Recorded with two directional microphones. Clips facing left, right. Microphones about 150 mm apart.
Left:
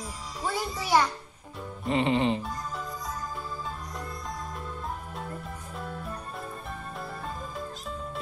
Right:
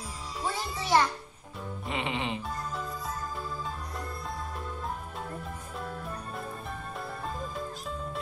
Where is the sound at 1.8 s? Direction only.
35° left (ahead or behind).